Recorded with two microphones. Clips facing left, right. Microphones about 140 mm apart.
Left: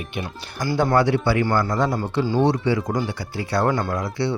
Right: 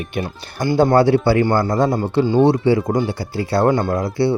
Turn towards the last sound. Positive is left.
turn(degrees=-30)  # may be behind; listen again after turning